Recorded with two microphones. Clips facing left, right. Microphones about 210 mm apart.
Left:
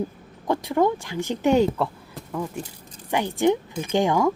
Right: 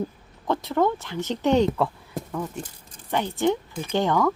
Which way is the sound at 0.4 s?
15° left (ahead or behind).